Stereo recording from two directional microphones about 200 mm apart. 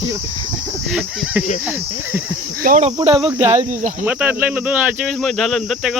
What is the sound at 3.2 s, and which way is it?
Speech, 10° right (ahead or behind).